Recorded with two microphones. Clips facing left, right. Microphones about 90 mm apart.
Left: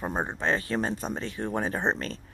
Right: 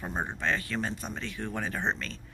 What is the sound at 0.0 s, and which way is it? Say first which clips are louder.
Speech: left 3 dB; 30° left (ahead or behind).